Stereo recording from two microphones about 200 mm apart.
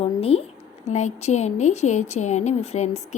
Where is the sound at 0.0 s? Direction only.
30° left (ahead or behind).